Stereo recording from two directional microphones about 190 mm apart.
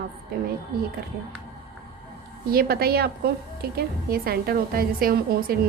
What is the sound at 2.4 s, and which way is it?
A woman's voice, 50° right (ahead or behind).